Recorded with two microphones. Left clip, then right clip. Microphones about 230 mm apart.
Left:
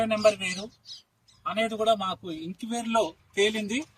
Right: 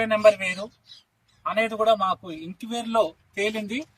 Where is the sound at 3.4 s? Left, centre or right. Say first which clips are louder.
Left 1 dB; centre.